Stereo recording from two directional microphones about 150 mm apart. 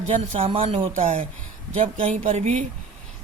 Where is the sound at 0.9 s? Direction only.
55° right (ahead or behind).